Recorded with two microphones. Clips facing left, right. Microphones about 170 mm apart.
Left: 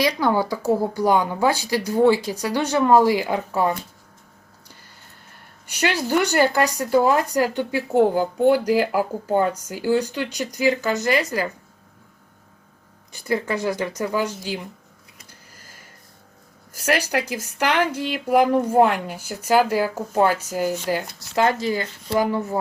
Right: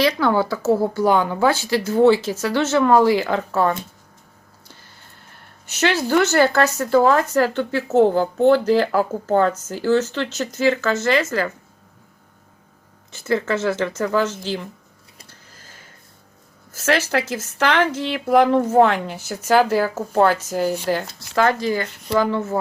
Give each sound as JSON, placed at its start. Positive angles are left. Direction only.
{"t": 0.0, "sound": "speech", "side_deg": 15}
{"t": 5.6, "sound": "speech", "side_deg": 10}
{"t": 13.2, "sound": "speech", "side_deg": 15}
{"t": 15.3, "sound": "a sound", "side_deg": 10}
{"t": 16.7, "sound": "speech", "side_deg": 10}